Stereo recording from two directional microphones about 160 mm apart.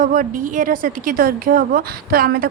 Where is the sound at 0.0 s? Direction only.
60° right (ahead or behind).